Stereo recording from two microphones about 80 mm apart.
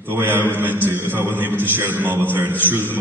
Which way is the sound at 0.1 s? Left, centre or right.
Right.